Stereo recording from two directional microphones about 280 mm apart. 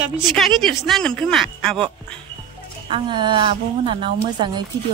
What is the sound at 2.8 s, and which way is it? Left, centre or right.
A woman's voice, centre.